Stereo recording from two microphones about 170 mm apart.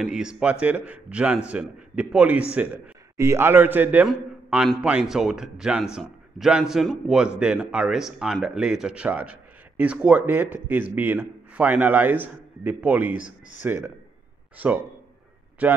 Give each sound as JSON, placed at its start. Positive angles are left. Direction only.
{"t": 0.0, "sound": "a man's voice", "side_deg": -5}